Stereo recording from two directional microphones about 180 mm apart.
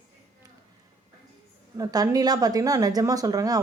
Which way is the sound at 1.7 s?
20° right (ahead or behind).